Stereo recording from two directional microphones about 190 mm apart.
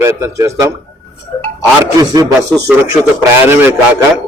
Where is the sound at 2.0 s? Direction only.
20° right (ahead or behind).